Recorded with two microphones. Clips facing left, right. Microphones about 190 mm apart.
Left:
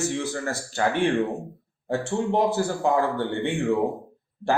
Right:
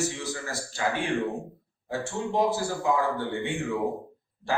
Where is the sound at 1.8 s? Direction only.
55° left (ahead or behind).